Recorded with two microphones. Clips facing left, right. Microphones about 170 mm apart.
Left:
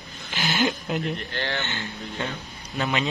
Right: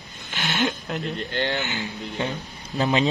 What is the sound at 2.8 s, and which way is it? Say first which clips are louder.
Speech: right 5 dB; 30° right (ahead or behind).